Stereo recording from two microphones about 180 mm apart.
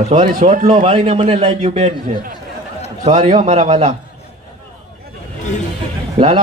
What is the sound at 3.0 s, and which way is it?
Speech, 40° right (ahead or behind).